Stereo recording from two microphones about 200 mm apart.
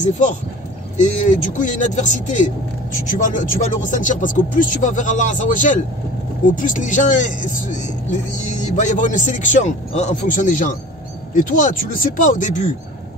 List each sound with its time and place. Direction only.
0.9 s speech: 35° left (ahead or behind)